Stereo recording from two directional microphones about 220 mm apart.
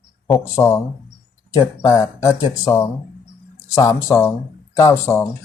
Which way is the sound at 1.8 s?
15° left (ahead or behind).